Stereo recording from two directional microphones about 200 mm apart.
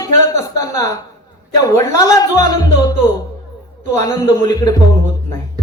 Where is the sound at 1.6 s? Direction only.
15° left (ahead or behind).